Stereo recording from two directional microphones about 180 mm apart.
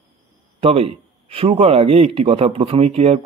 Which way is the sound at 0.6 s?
35° right (ahead or behind).